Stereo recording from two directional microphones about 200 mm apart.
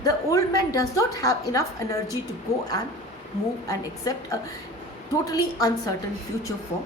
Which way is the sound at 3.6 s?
15° left (ahead or behind).